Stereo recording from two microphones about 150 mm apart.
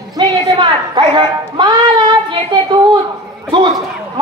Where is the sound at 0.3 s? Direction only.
30° right (ahead or behind).